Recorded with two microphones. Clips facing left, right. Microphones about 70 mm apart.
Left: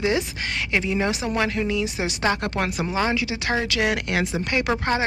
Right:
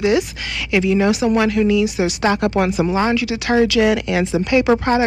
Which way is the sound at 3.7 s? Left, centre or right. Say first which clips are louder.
Right 7 dB; left.